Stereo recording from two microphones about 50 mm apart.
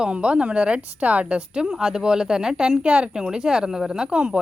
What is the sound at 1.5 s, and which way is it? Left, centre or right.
Speech, centre.